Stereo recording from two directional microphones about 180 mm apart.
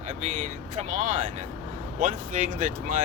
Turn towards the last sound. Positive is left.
turn(degrees=-45)  # may be behind; listen again after turning